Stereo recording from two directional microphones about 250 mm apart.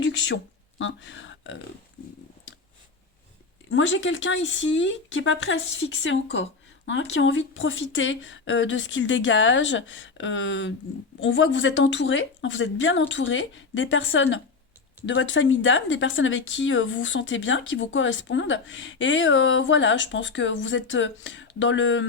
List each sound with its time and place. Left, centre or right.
0.8 s speech: left
3.7 s speech: left